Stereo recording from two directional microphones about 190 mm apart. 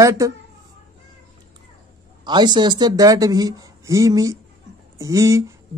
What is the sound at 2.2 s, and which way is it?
Speech, 25° right (ahead or behind).